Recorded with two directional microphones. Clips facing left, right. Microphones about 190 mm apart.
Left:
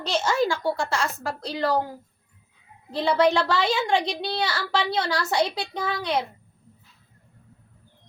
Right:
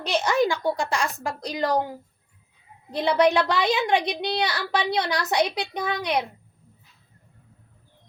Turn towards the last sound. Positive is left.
turn(degrees=-20)  # may be behind; listen again after turning